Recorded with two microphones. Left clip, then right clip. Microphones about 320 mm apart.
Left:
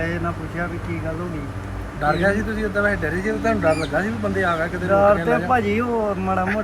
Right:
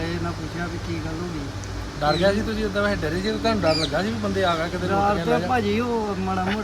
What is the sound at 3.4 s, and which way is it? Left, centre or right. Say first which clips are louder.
Speech: left 2 dB; centre.